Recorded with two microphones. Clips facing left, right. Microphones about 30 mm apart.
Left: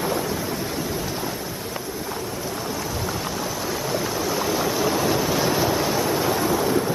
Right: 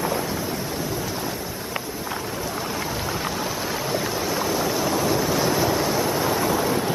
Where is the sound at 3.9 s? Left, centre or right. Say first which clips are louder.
Left 1 dB; centre.